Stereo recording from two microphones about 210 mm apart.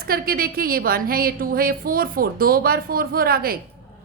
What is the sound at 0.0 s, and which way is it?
A woman's voice, 45° right (ahead or behind).